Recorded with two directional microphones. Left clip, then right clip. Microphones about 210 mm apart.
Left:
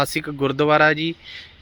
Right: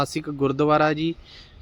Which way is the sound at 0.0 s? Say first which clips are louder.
Left 3 dB; 5° right (ahead or behind).